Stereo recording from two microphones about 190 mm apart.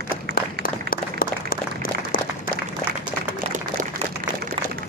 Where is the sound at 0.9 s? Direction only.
50° left (ahead or behind).